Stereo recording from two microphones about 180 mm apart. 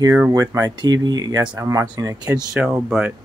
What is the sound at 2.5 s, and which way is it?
Speech, 5° right (ahead or behind).